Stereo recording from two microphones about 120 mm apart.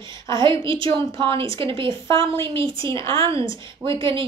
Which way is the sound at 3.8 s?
45° right (ahead or behind).